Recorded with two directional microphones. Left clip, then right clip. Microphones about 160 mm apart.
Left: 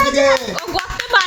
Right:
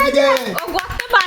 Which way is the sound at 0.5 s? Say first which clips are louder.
Even; 40° right (ahead or behind).